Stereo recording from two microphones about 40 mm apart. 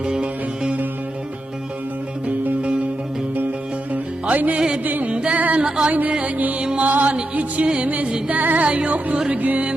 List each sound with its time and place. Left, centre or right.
0.2 s music: right
2.2 s music: right
4.3 s music: right
4.5 s music: centre
4.8 s music: right
5.1 s music: right
5.4 s music: right
5.6 s music: centre
5.9 s music: right